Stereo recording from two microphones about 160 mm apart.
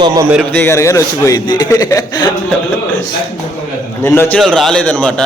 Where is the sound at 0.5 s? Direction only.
15° left (ahead or behind).